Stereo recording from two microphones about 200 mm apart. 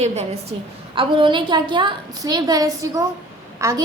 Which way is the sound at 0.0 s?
35° right (ahead or behind).